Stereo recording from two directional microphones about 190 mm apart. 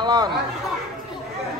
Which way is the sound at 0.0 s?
20° right (ahead or behind).